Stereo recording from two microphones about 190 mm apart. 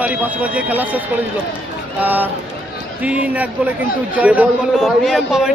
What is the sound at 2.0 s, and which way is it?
A man's voice, 10° right (ahead or behind).